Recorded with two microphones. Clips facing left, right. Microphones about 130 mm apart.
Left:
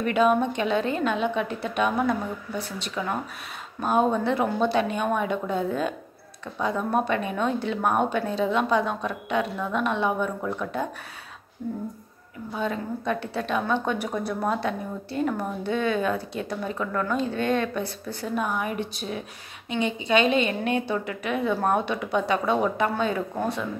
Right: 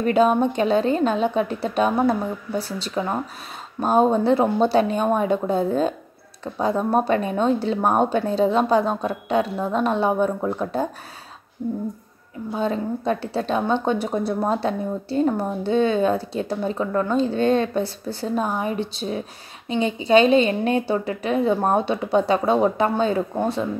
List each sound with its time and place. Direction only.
0.0 s a woman's voice: 35° right (ahead or behind)
12.5 s a woman's voice: 30° right (ahead or behind)